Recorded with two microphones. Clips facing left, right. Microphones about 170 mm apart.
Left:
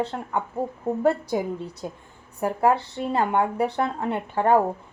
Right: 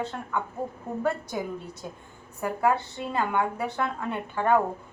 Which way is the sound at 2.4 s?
30° left (ahead or behind).